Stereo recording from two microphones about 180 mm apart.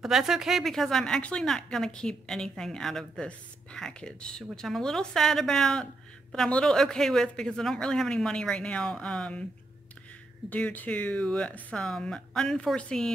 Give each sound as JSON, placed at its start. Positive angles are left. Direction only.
{"t": 0.0, "sound": "a woman's voice", "side_deg": 0}
{"t": 10.5, "sound": "speech", "side_deg": 10}